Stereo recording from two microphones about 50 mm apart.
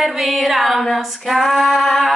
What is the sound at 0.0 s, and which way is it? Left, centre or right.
Female singing, centre.